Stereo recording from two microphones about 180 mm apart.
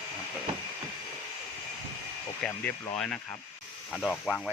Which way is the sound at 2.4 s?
5° left (ahead or behind).